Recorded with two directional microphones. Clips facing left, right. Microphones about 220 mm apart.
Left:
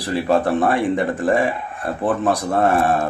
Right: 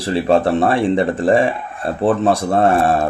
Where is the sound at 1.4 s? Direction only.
25° right (ahead or behind).